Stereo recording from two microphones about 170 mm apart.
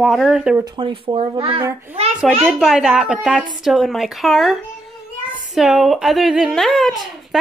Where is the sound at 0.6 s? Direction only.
30° right (ahead or behind).